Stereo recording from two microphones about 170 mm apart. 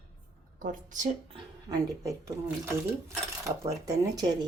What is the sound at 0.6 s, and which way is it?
Speech, 50° right (ahead or behind).